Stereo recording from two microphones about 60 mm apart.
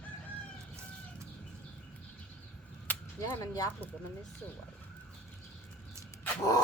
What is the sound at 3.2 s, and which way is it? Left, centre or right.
Whip, left.